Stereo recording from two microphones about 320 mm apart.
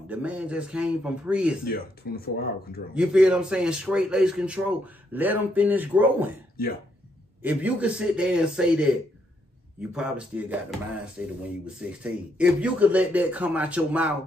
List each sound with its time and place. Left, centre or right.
0.1 s speech: centre
2.0 s speech: left
2.9 s speech: centre
7.4 s speech: centre